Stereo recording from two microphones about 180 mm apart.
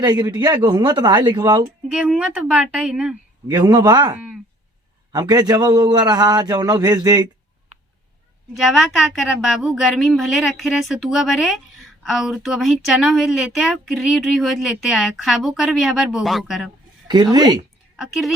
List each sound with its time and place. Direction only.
0.0 s a man's voice: 25° right (ahead or behind)
1.9 s a woman's voice: 5° right (ahead or behind)
3.5 s a man's voice: 25° right (ahead or behind)
4.1 s speech: 5° right (ahead or behind)
5.1 s a man's voice: 20° right (ahead or behind)
8.5 s a woman's voice: centre (ahead or behind)
17.1 s a man's voice: 25° right (ahead or behind)
17.9 s speech: centre (ahead or behind)